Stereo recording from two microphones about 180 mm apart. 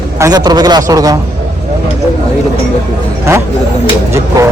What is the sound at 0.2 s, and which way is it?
A man's voice, 20° right (ahead or behind).